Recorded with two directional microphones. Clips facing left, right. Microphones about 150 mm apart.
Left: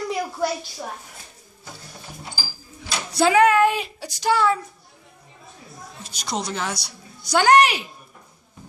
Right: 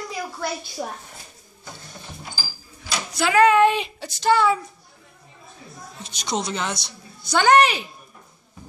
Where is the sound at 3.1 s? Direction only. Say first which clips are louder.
Left 5 dB; 30° left (ahead or behind).